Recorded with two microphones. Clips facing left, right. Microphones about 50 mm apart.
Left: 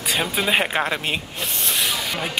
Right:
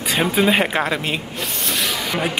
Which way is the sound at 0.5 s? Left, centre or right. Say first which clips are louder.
Right 3 dB; centre.